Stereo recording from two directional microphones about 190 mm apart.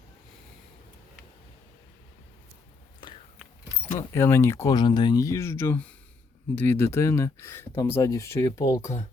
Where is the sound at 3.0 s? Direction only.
25° left (ahead or behind).